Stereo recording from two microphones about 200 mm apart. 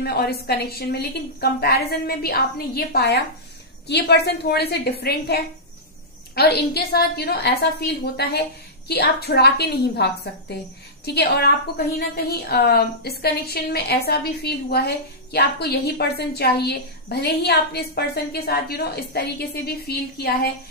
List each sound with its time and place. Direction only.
0.0 s a woman's voice: 50° left (ahead or behind)